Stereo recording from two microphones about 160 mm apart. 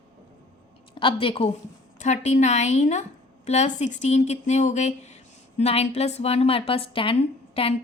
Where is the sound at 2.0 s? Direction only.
45° left (ahead or behind).